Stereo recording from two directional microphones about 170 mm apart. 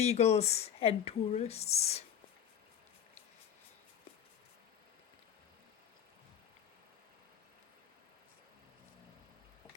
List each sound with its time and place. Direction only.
0.0 s speech: 40° left (ahead or behind)